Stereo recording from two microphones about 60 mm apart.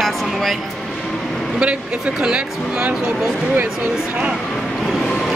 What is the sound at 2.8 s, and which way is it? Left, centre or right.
Speech, right.